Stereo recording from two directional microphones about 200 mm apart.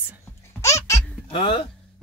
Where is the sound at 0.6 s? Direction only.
15° left (ahead or behind).